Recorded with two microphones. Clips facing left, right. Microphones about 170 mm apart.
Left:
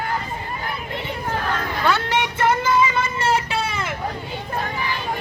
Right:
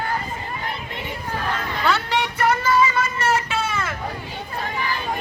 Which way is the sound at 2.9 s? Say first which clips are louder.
Left 1 dB; 30° left (ahead or behind).